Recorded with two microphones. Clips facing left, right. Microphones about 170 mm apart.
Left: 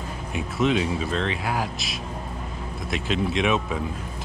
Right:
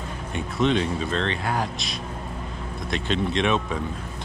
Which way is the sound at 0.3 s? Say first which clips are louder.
Even; 5° left (ahead or behind).